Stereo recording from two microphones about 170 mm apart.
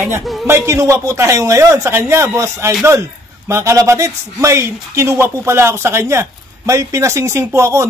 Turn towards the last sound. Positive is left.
turn(degrees=-15)  # may be behind; listen again after turning